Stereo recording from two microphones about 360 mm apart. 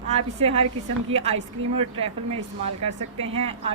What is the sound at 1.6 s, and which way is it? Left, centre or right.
Speech, right.